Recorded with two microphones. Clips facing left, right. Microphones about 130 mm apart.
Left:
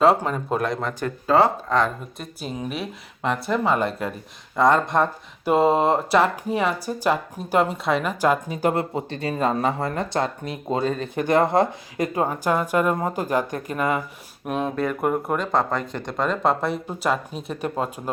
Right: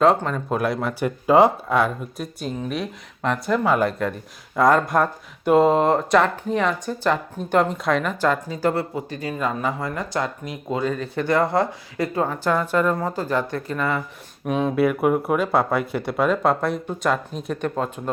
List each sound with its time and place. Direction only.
0.0 s speech: 5° left (ahead or behind)
0.6 s speech: 5° right (ahead or behind)
8.4 s speech: 20° left (ahead or behind)
14.4 s speech: centre (ahead or behind)